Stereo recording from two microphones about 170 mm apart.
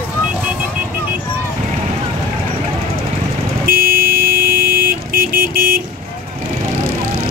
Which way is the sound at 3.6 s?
60° right (ahead or behind).